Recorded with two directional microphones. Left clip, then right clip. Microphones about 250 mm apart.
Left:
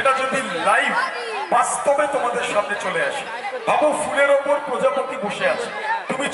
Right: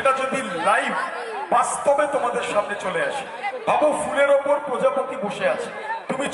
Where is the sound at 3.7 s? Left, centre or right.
Right.